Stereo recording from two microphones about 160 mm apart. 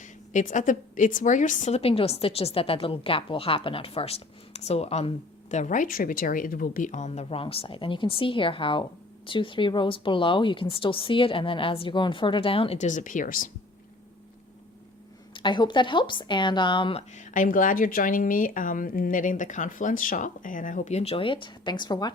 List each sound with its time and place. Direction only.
0.0 s a woman's voice: 50° left (ahead or behind)
15.3 s speech: 30° left (ahead or behind)